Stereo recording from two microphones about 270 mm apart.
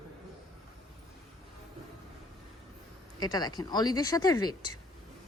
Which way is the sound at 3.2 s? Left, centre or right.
Centre.